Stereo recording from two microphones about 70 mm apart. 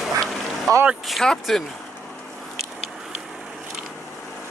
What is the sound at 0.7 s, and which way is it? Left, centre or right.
Speech, right.